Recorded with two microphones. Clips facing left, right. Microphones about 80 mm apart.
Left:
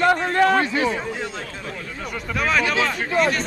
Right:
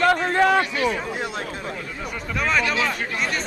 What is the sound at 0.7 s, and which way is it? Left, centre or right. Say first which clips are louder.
Speech: left 1 dB; left.